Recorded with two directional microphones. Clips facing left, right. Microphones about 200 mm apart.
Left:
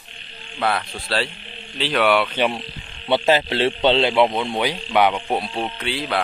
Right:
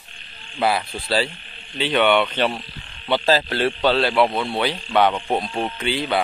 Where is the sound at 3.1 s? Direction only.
20° left (ahead or behind).